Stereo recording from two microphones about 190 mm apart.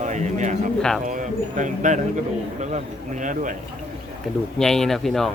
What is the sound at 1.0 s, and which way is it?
Speech, 40° right (ahead or behind).